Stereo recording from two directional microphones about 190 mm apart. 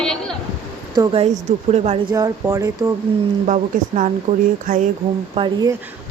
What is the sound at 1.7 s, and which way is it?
Speech, 35° right (ahead or behind).